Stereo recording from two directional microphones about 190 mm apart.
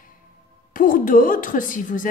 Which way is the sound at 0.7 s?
45° left (ahead or behind).